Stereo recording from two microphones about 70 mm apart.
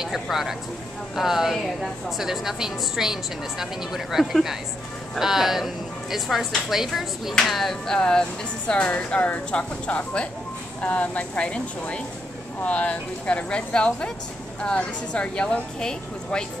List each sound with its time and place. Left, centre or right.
0.0 s a woman's voice: centre